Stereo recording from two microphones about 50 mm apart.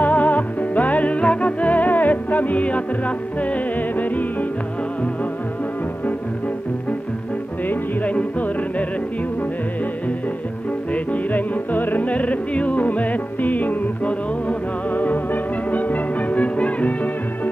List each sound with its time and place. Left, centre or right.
0.0 s music: left
7.6 s music: left
10.9 s music: left